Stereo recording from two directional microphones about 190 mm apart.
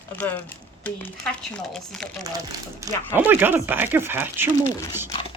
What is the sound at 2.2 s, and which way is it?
Speech, 20° right (ahead or behind).